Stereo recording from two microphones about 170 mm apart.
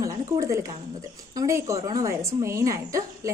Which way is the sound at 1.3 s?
20° right (ahead or behind).